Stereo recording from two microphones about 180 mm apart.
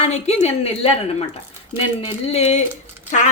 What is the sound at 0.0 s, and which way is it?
Speech, 35° left (ahead or behind).